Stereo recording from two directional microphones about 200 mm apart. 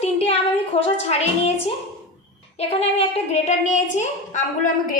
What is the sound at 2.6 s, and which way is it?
A woman's voice, 30° left (ahead or behind).